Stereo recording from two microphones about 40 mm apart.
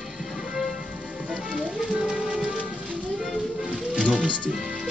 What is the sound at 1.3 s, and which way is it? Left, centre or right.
Music, right.